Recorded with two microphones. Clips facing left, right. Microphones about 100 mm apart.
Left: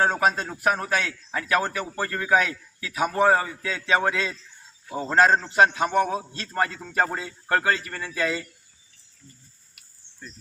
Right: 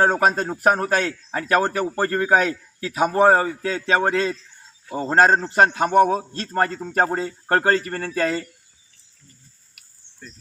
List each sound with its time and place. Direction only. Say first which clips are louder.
0.0 s a man's voice: right 4 dB; 40° right (ahead or behind)